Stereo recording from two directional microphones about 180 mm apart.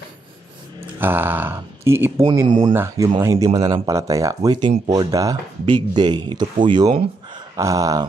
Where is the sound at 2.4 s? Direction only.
25° right (ahead or behind).